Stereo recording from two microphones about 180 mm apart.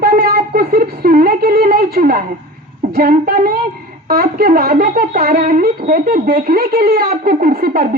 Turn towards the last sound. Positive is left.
turn(degrees=-55)  # may be behind; listen again after turning